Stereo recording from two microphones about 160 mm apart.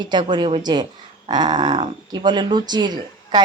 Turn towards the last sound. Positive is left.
turn(degrees=-25)  # may be behind; listen again after turning